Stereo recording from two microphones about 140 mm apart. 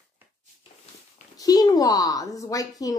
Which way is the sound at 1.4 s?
25° left (ahead or behind).